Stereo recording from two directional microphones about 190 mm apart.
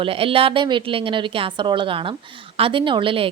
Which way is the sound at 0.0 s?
30° right (ahead or behind).